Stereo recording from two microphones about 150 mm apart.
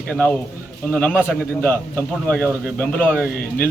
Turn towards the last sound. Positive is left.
turn(degrees=10)  # may be behind; listen again after turning